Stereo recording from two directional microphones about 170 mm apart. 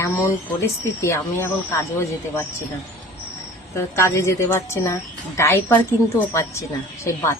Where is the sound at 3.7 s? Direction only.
15° left (ahead or behind).